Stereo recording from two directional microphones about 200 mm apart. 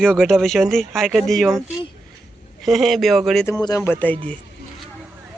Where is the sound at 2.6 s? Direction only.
Centre (ahead or behind).